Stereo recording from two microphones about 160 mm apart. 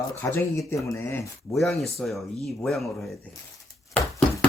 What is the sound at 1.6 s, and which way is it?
Speech, centre (ahead or behind).